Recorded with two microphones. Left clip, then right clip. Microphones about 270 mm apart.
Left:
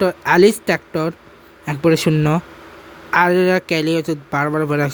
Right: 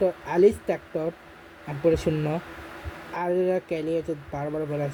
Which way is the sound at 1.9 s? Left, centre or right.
Left.